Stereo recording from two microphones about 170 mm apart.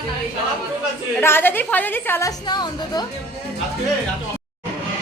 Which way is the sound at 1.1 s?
15° left (ahead or behind).